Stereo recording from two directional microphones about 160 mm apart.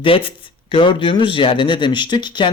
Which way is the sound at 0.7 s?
30° left (ahead or behind).